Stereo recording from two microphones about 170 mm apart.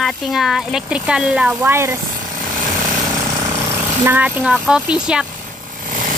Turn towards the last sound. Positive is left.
turn(degrees=-5)  # may be behind; listen again after turning